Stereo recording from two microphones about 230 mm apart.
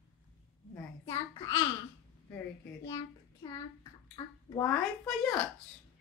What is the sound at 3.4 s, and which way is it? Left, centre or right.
A child's voice, centre.